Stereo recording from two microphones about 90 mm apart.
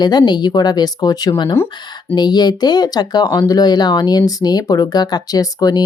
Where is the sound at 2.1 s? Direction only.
50° left (ahead or behind).